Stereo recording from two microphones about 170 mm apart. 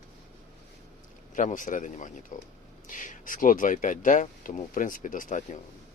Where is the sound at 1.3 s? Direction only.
50° left (ahead or behind).